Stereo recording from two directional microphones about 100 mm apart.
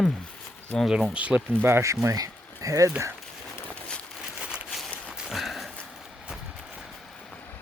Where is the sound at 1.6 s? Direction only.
25° right (ahead or behind).